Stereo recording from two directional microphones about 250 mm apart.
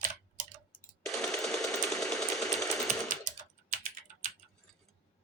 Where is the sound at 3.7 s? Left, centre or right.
Right.